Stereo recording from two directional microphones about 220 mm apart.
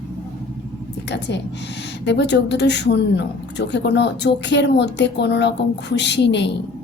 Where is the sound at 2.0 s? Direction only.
50° left (ahead or behind).